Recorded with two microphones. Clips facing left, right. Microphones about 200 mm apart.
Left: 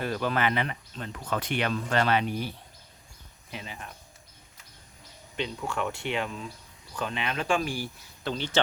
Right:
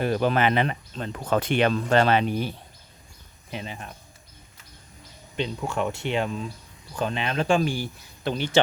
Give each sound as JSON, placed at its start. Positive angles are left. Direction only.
{"t": 0.0, "sound": "speech", "side_deg": -20}
{"t": 5.4, "sound": "speech", "side_deg": -30}